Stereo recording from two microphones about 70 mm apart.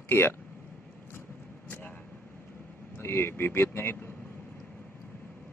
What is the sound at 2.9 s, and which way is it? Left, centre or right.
A man's voice, left.